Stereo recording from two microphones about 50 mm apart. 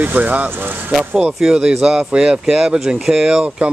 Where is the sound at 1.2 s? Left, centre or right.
Right.